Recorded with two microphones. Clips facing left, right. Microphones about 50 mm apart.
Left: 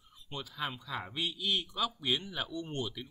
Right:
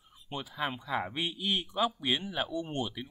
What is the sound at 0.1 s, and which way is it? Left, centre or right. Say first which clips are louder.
A man's voice: right 3 dB; centre.